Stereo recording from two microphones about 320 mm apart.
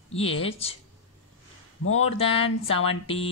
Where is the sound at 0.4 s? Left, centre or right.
Centre.